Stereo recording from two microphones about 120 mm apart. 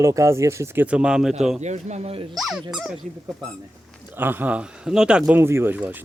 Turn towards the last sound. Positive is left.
turn(degrees=-15)  # may be behind; listen again after turning